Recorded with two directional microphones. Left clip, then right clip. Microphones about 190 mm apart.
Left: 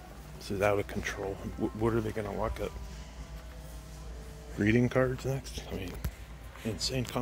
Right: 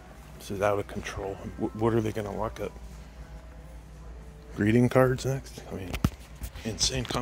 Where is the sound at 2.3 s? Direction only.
15° right (ahead or behind).